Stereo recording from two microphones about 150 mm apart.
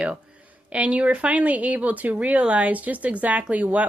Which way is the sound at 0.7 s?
10° right (ahead or behind).